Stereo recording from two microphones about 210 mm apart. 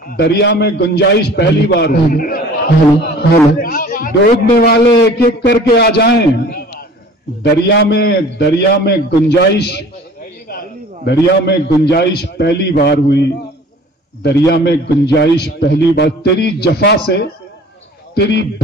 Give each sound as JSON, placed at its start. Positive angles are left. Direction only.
{"t": 0.1, "sound": "a man's voice", "side_deg": 50}
{"t": 3.0, "sound": "a sound", "side_deg": 45}
{"t": 4.6, "sound": "a man's voice", "side_deg": 50}
{"t": 7.6, "sound": "a man's voice", "side_deg": 50}
{"t": 11.1, "sound": "a man's voice", "side_deg": 50}